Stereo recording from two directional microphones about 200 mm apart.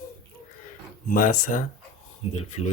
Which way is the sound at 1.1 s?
40° left (ahead or behind).